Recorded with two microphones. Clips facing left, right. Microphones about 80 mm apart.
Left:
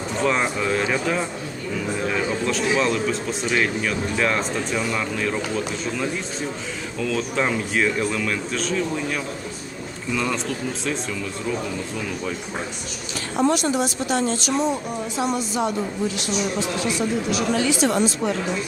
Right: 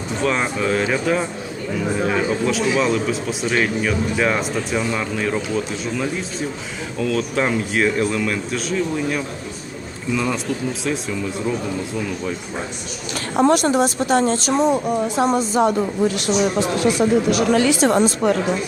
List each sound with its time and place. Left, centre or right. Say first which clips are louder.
0.2 s a man's voice: right 1 dB; centre
13.3 s speech: right 5 dB; right
15.3 s a woman's voice: right 6 dB; right
16.0 s speech: right 6 dB; right
17.7 s speech: right 4 dB; right